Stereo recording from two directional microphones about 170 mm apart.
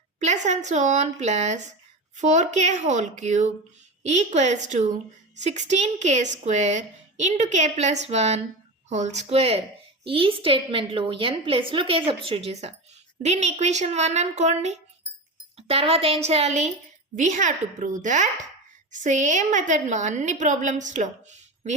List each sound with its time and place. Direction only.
0.2 s a woman's voice: 40° right (ahead or behind)